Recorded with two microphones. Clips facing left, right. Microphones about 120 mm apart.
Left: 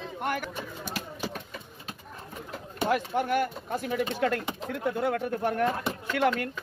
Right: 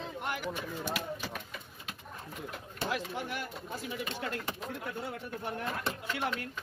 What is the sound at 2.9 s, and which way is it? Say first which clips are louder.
Speech: left 11 dB; 55° left (ahead or behind).